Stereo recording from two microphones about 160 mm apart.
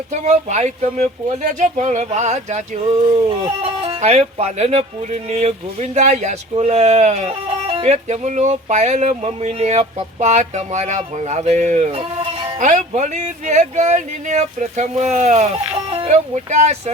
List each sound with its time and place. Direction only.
0.1 s speech: 45° right (ahead or behind)
12.5 s speech: 50° right (ahead or behind)